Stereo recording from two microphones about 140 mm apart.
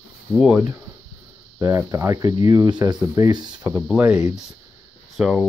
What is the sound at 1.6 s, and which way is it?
Speech, 20° right (ahead or behind).